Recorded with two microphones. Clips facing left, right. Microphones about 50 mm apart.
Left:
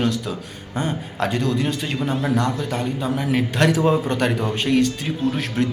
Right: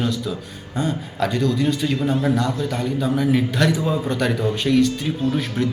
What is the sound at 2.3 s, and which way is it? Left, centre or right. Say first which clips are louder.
Speech: even; left.